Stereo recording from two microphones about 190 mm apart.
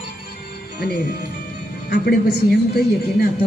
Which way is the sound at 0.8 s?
60° left (ahead or behind).